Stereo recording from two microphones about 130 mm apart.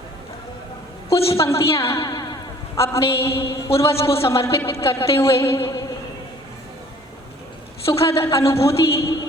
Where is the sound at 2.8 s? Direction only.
20° left (ahead or behind).